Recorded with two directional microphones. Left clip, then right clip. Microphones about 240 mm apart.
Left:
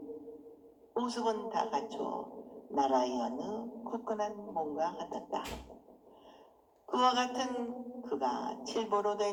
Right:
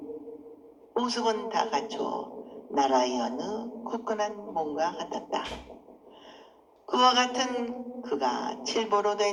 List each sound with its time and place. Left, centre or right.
0.9 s a woman's voice: right
6.8 s a woman's voice: right